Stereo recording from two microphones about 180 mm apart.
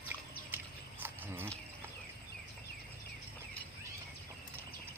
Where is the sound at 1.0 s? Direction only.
10° right (ahead or behind).